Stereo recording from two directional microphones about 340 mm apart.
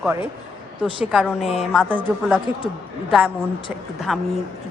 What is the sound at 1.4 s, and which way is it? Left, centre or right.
Speech, centre.